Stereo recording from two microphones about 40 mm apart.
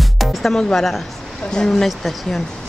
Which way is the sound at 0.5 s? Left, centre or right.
Centre.